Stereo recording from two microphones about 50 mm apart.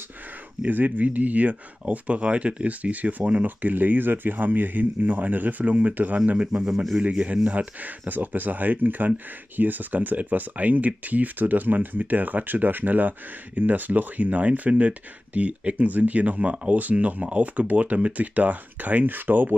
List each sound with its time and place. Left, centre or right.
0.6 s speech: right; by 6.7 s centre
6.7 s a man's voice: centre
7.0 s speech: right